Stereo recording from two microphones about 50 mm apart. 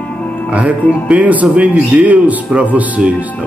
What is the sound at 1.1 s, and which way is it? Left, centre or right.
Speech, right.